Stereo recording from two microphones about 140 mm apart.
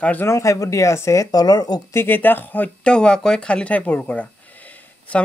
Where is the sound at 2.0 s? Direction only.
15° left (ahead or behind).